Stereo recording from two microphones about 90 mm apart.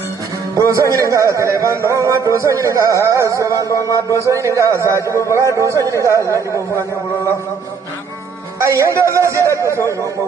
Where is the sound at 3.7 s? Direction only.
35° left (ahead or behind).